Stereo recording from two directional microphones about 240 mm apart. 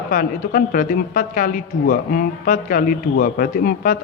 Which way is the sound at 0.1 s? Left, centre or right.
Left.